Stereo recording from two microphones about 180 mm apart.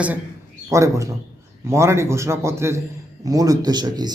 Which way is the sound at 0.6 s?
15° right (ahead or behind).